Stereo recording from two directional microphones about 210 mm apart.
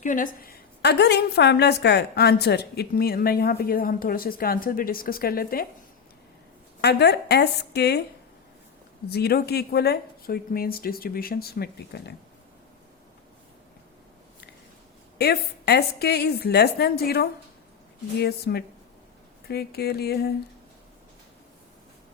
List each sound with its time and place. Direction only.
0.0 s a woman's voice: 40° left (ahead or behind)
6.8 s a woman's voice: 50° left (ahead or behind)
9.0 s a woman's voice: 50° left (ahead or behind)
15.2 s a woman's voice: 50° left (ahead or behind)